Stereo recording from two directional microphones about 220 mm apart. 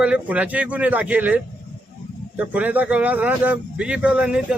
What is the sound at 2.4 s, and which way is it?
Speech, 5° right (ahead or behind).